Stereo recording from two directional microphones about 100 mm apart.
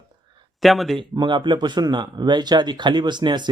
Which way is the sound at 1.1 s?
50° right (ahead or behind).